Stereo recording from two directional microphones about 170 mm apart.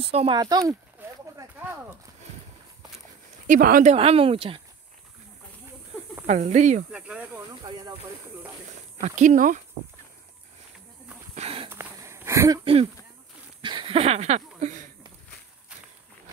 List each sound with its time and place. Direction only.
0.0 s speech: 35° right (ahead or behind)
0.4 s a sound: 20° right (ahead or behind)
3.4 s speech: 55° right (ahead or behind)
3.9 s speech: 35° right (ahead or behind)
6.2 s speech: 45° right (ahead or behind)
6.9 s speech: 5° right (ahead or behind)
9.0 s speech: 45° right (ahead or behind)
11.3 s a sound: 35° right (ahead or behind)
11.7 s wheeze: 15° right (ahead or behind)
13.6 s a sound: 30° right (ahead or behind); by 14.9 s 45° right (ahead or behind)